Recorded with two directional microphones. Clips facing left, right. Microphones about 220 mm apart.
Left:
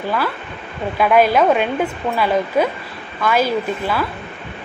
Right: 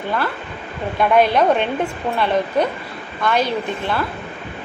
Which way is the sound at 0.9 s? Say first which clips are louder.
Left 1 dB; 5° left (ahead or behind).